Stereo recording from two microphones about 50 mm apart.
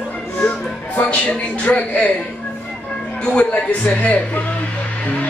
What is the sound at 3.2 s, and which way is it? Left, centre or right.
Speech, left.